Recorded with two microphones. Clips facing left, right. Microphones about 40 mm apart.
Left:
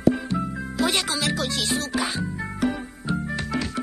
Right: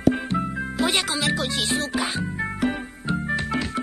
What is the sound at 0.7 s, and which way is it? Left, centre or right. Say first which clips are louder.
Speech: even; centre.